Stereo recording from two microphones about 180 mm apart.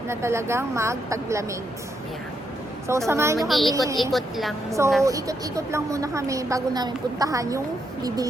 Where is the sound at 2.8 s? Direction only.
15° right (ahead or behind).